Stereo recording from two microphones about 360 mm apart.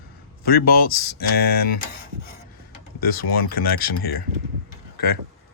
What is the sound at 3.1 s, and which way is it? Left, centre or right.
Speech, left.